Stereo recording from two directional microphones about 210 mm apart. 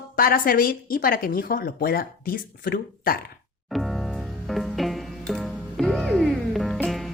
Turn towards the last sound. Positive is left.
turn(degrees=0)  # may be behind; listen again after turning